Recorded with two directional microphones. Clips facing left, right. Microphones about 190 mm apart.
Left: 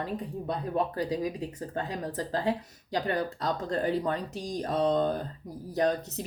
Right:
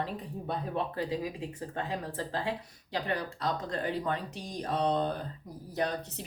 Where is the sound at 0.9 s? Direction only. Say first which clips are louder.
Left 3 dB; 40° left (ahead or behind).